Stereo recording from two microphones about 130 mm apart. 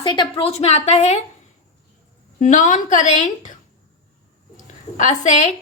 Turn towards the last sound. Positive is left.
turn(degrees=65)  # may be behind; listen again after turning